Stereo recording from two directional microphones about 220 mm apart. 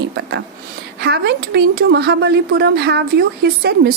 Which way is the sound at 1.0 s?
50° right (ahead or behind).